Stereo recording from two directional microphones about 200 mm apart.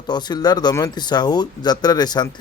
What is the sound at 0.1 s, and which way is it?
Speech, 20° left (ahead or behind).